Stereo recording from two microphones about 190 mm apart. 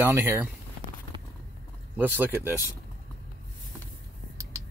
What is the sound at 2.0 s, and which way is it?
Speech, 10° right (ahead or behind).